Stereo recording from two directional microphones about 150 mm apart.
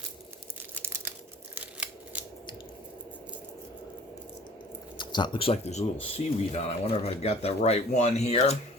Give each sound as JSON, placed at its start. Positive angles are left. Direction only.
{"t": 1.5, "sound": "scissors", "side_deg": -10}
{"t": 4.9, "sound": "speech", "side_deg": 30}